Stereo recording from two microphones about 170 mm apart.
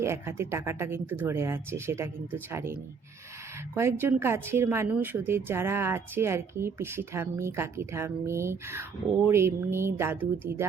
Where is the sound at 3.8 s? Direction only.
15° right (ahead or behind).